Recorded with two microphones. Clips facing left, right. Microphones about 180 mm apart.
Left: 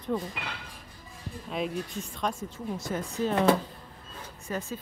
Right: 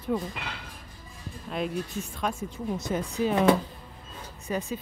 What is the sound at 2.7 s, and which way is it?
Speech, 20° right (ahead or behind).